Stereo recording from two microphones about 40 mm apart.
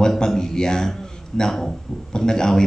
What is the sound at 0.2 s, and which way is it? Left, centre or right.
A man's voice, centre.